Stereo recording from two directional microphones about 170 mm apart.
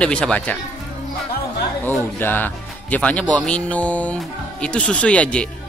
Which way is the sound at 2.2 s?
10° left (ahead or behind).